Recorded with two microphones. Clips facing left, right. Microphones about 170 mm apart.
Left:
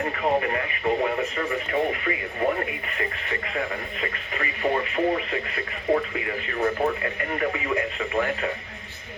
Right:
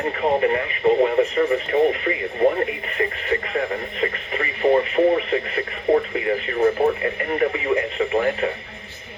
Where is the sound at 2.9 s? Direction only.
35° right (ahead or behind).